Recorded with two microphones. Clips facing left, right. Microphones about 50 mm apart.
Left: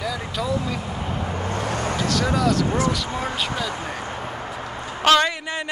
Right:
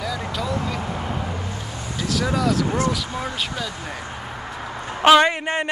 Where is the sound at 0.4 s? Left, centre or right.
Centre.